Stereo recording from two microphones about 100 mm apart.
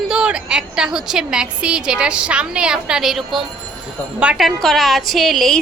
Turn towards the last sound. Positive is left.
turn(degrees=0)  # may be behind; listen again after turning